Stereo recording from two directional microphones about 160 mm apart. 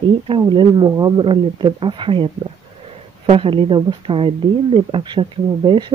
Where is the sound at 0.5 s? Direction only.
30° right (ahead or behind).